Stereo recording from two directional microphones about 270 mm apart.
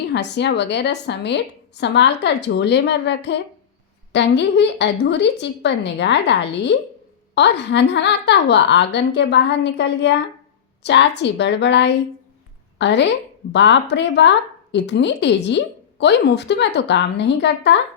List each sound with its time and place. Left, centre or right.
0.0 s speech: left